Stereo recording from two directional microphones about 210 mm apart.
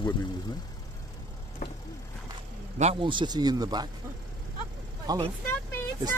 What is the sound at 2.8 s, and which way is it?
Speech, 25° right (ahead or behind).